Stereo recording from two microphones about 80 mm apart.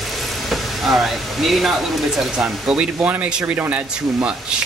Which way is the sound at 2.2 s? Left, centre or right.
Centre.